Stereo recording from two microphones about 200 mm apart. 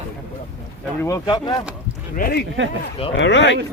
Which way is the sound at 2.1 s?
50° left (ahead or behind).